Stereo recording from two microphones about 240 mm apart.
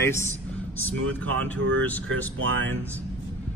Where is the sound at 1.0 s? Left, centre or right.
Right.